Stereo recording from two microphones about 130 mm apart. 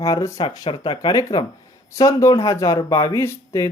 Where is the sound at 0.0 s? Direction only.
25° left (ahead or behind).